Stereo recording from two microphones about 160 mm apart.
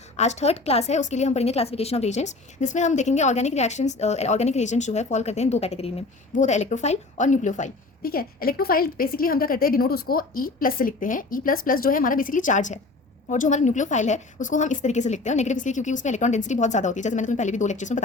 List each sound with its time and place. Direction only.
0.2 s a woman's voice: 45° left (ahead or behind)